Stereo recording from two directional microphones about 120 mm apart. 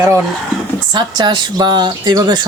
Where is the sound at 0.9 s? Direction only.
35° right (ahead or behind).